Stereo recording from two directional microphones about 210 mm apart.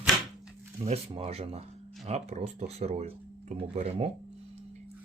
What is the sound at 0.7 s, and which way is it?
Speech, 30° right (ahead or behind).